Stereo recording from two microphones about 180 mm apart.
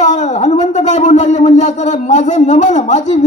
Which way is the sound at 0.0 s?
40° left (ahead or behind).